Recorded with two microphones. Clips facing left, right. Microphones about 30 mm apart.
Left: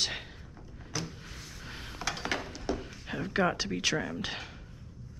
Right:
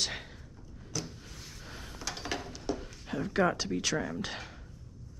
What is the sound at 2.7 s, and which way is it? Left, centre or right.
Speech, centre.